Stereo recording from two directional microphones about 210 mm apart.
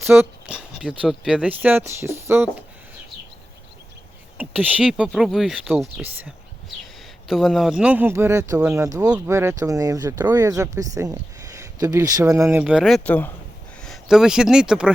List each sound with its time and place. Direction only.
0.0 s speech: 10° right (ahead or behind)
4.6 s speech: 5° right (ahead or behind)